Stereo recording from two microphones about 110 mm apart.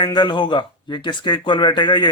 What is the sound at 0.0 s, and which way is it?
Speech, 40° left (ahead or behind).